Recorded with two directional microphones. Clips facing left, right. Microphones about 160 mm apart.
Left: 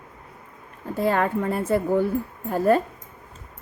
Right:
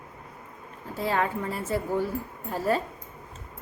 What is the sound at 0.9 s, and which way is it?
Speech, 55° left (ahead or behind).